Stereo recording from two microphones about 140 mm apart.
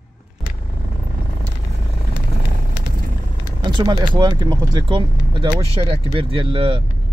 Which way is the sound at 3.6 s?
30° right (ahead or behind).